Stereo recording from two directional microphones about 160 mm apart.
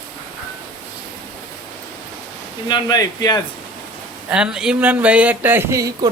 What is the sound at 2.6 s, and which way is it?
Speech, 25° left (ahead or behind).